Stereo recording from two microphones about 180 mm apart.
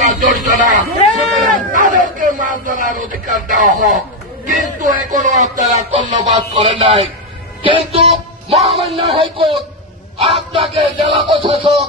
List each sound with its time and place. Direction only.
0.0 s a sound: 45° right (ahead or behind)
6.5 s music: 30° right (ahead or behind)
7.6 s speech: 30° right (ahead or behind)
10.3 s music: 30° right (ahead or behind)